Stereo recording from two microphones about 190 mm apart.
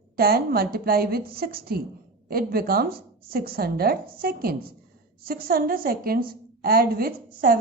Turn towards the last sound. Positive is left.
turn(degrees=-50)  # may be behind; listen again after turning